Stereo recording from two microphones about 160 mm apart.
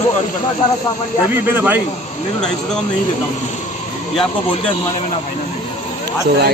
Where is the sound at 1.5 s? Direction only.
10° right (ahead or behind).